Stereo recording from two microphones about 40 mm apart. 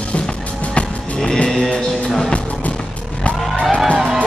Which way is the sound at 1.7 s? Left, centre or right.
Centre.